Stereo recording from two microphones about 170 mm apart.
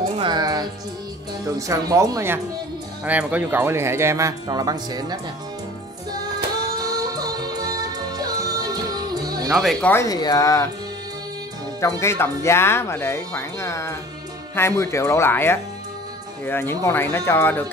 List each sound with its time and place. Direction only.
0.2 s music: 25° right (ahead or behind)
1.7 s speech: 20° right (ahead or behind)
6.8 s music: 25° right (ahead or behind)
9.5 s speech: centre (ahead or behind)
9.8 s speech: 20° left (ahead or behind)
12.0 s speech: 15° left (ahead or behind)